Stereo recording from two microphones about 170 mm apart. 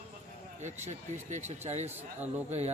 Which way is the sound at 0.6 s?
45° right (ahead or behind).